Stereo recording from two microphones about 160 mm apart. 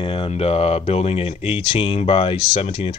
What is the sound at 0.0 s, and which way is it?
Speech, 30° left (ahead or behind).